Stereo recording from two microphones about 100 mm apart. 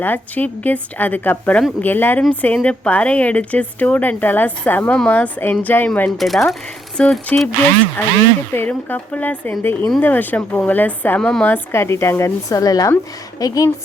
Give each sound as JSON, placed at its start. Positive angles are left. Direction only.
{"t": 0.0, "sound": "speech", "side_deg": 15}
{"t": 6.1, "sound": "speech", "side_deg": 0}
{"t": 8.5, "sound": "speech", "side_deg": 20}
{"t": 11.2, "sound": "speech", "side_deg": 5}
{"t": 11.4, "sound": "speech", "side_deg": 25}